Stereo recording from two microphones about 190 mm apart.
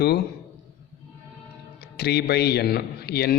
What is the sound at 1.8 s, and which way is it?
A man's voice, 60° left (ahead or behind).